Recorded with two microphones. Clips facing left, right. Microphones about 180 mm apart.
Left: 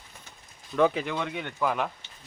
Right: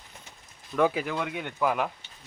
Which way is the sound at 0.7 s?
5° right (ahead or behind).